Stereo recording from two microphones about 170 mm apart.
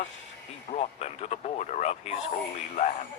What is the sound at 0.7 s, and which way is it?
Speech, 40° left (ahead or behind).